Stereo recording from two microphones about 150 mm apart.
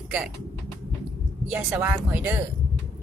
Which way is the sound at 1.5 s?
10° right (ahead or behind).